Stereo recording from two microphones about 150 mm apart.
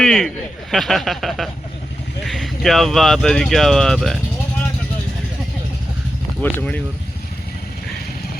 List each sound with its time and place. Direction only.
0.0 s speech: 5° left (ahead or behind)
6.4 s speech: 10° left (ahead or behind)